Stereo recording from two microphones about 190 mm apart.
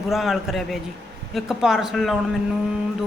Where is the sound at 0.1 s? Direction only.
Centre (ahead or behind).